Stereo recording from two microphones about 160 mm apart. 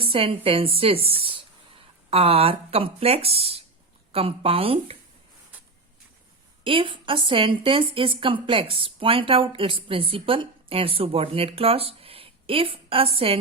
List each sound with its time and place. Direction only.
0.0 s a woman's voice: 35° right (ahead or behind)
6.7 s a woman's voice: 30° right (ahead or behind)